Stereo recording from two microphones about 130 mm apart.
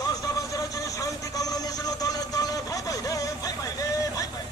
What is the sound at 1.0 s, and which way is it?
Vehicle, 30° left (ahead or behind).